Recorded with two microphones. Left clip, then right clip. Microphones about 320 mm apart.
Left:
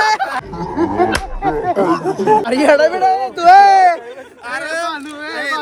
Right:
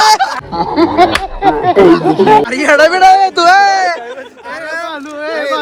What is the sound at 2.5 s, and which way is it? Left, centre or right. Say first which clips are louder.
Speech: right 3 dB; centre.